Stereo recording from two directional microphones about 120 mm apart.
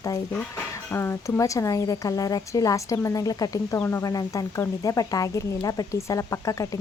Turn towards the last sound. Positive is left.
turn(degrees=30)  # may be behind; listen again after turning